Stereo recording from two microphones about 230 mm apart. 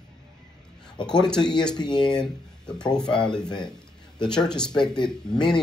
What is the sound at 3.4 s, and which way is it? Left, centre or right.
Speech, centre.